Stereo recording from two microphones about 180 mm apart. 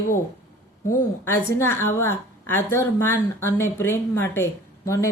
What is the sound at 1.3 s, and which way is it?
A woman's voice, 15° left (ahead or behind).